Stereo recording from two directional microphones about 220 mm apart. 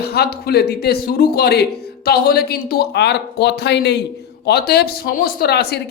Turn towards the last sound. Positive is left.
turn(degrees=45)  # may be behind; listen again after turning